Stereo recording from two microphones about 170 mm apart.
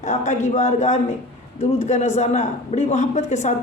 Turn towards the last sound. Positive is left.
turn(degrees=45)  # may be behind; listen again after turning